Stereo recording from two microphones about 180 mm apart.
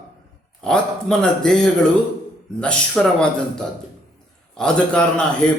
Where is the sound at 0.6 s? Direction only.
5° left (ahead or behind).